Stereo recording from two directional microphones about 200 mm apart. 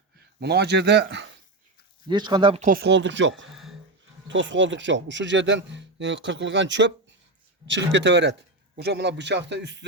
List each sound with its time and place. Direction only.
0.3 s speech: 55° right (ahead or behind)
2.0 s speech: 20° right (ahead or behind)
2.6 s speech: 45° right (ahead or behind); by 3.4 s 65° right (ahead or behind)
3.5 s a sound: centre (ahead or behind)
4.3 s speech: 65° right (ahead or behind)